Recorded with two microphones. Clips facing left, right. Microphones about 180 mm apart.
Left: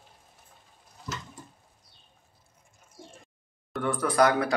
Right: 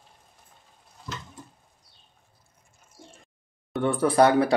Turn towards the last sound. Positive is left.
turn(degrees=-30)  # may be behind; listen again after turning